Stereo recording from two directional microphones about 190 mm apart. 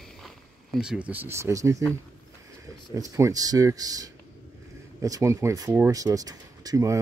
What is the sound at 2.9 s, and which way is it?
Speech, 20° right (ahead or behind).